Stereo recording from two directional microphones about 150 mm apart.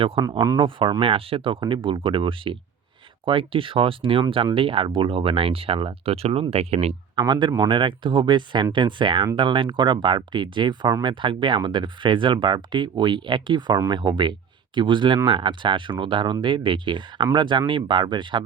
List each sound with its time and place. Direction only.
0.0 s speech: 35° right (ahead or behind)
0.3 s speech: 20° right (ahead or behind)
0.6 s speech: 35° right (ahead or behind)
7.2 s speech: 30° right (ahead or behind)